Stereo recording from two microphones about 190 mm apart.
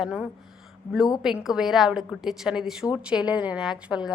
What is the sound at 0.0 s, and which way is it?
A woman's voice, 5° right (ahead or behind).